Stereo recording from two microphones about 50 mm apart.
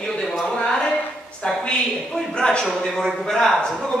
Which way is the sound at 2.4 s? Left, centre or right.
Centre.